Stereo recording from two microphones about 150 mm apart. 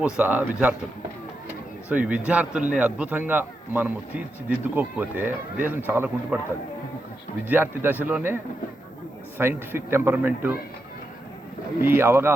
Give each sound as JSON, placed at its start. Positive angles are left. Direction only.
{"t": 0.0, "sound": "a man's voice", "side_deg": -10}
{"t": 1.9, "sound": "a man's voice", "side_deg": -10}
{"t": 7.4, "sound": "a man's voice", "side_deg": -15}
{"t": 9.4, "sound": "a man's voice", "side_deg": -15}
{"t": 11.8, "sound": "a man's voice", "side_deg": -15}